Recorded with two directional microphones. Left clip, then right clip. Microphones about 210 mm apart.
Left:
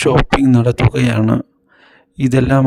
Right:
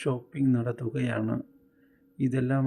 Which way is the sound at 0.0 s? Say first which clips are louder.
Left 17 dB; 55° left (ahead or behind).